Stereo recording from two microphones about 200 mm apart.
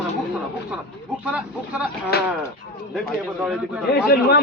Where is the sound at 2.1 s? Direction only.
50° left (ahead or behind).